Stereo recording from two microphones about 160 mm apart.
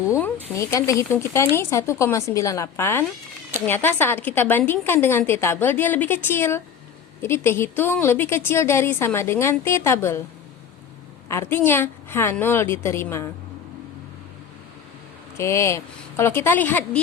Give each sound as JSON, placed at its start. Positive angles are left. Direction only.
{"t": 0.5, "sound": "a woman's voice", "side_deg": 20}
{"t": 11.3, "sound": "a woman's voice", "side_deg": 15}
{"t": 15.4, "sound": "a woman's voice", "side_deg": 15}